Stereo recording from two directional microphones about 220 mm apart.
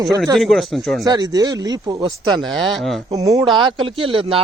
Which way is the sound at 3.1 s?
15° right (ahead or behind).